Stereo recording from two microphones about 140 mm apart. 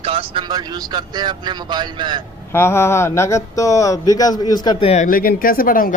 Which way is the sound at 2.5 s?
20° left (ahead or behind).